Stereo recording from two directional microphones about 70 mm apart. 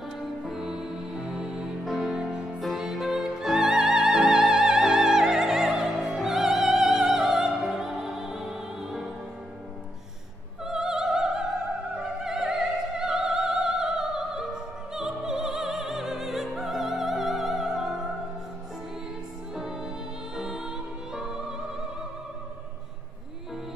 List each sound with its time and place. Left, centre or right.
0.4 s music: centre
10.6 s opera: centre
15.0 s music: centre
19.5 s music: centre